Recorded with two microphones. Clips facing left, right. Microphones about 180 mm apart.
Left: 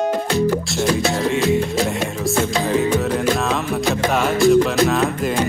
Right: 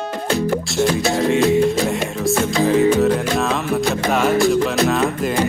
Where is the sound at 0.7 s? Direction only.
Centre (ahead or behind).